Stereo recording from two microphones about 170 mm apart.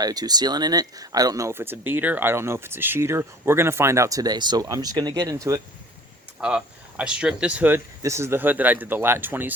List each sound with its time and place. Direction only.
0.0 s speech: 20° right (ahead or behind)
6.4 s speech: 5° right (ahead or behind)